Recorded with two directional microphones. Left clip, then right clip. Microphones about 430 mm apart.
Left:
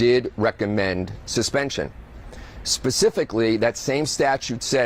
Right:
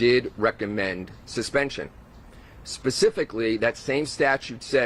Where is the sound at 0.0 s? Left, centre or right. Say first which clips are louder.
Left 2 dB; left.